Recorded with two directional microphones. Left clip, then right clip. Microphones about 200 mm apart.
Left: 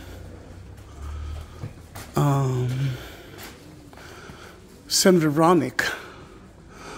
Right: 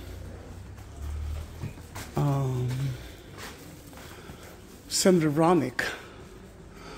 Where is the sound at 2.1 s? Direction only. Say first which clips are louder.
Left 7 dB; 30° left (ahead or behind).